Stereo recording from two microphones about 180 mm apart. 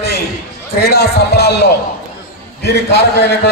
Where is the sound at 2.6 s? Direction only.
65° left (ahead or behind).